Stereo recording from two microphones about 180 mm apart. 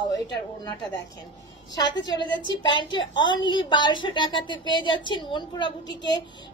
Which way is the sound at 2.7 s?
25° left (ahead or behind).